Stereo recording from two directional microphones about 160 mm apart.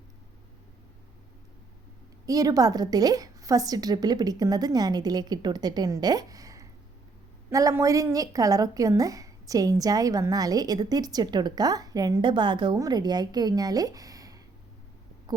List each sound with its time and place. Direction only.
2.2 s a woman's voice: 20° right (ahead or behind)